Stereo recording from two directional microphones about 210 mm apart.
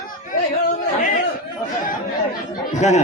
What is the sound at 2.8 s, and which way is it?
Speech, 35° left (ahead or behind).